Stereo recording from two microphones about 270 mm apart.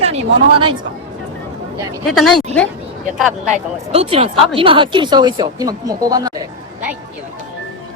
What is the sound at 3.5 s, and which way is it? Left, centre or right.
Speech, right.